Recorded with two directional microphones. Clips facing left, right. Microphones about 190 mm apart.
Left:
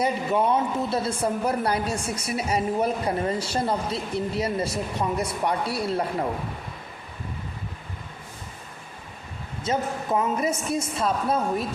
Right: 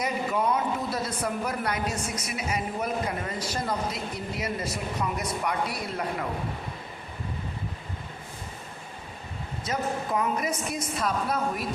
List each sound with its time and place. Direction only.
0.0 s a woman's voice: 30° left (ahead or behind)
9.7 s a woman's voice: 25° left (ahead or behind)